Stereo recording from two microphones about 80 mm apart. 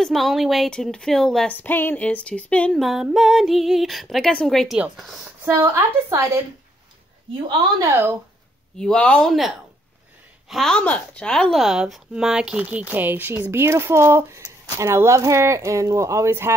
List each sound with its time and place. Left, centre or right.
0.0 s speech: centre
1.5 s a sound: left
2.7 s speech: centre
5.2 s speech: right
8.7 s a woman's voice: centre
9.3 s a woman's voice: centre
11.5 s speech: centre; by 16.5 s right